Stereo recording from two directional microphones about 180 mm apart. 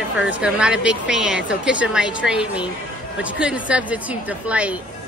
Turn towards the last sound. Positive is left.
turn(degrees=-5)  # may be behind; listen again after turning